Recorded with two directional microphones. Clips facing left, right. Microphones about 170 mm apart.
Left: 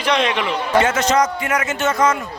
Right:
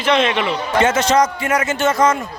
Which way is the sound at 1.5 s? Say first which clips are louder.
Right 3 dB; 30° right (ahead or behind).